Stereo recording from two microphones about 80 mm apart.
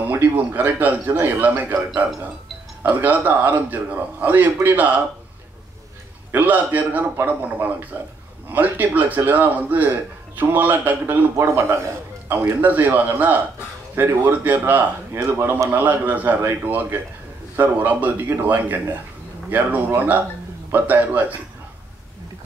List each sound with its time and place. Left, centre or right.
0.0 s a man's voice: right
2.8 s a man's voice: right
6.3 s a man's voice: right
11.3 s a man's voice: right
12.3 s a man's voice: right
15.3 s a man's voice: right
15.7 s a man's voice: right
20.0 s a man's voice: right